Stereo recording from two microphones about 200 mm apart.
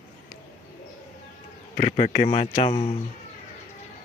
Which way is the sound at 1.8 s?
30° left (ahead or behind).